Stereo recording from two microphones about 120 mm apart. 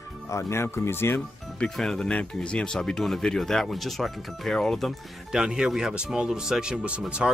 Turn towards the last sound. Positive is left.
turn(degrees=-10)  # may be behind; listen again after turning